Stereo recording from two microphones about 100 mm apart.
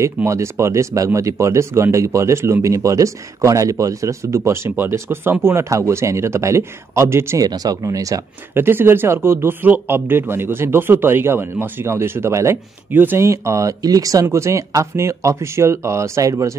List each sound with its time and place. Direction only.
0.0 s speech: 30° right (ahead or behind)
7.4 s speech: 40° right (ahead or behind)
8.5 s speech: 20° right (ahead or behind)